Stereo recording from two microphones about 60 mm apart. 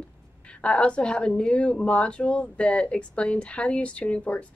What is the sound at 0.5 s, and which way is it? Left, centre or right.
A woman's voice, left.